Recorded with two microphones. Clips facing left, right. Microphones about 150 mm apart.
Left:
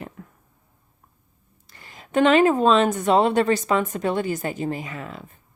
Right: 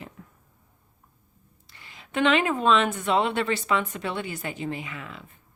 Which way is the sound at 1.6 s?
45° left (ahead or behind).